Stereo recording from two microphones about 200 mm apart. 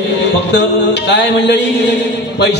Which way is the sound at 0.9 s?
60° left (ahead or behind).